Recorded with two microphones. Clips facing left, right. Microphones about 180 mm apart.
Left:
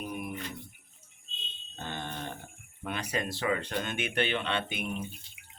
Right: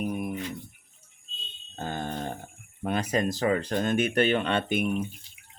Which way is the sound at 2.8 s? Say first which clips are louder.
Right 7 dB; 40° right (ahead or behind).